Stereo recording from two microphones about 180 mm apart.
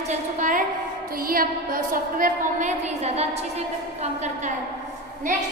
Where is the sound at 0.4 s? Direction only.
45° right (ahead or behind).